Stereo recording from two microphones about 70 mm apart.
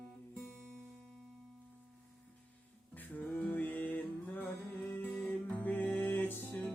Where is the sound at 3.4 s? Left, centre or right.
Left.